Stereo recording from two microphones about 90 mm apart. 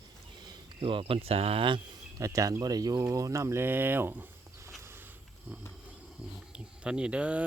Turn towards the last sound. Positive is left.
turn(degrees=-15)  # may be behind; listen again after turning